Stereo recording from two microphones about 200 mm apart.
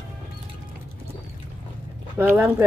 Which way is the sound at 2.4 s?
15° right (ahead or behind).